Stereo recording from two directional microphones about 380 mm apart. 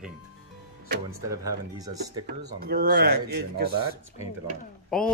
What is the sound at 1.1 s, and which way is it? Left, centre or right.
Speech, centre.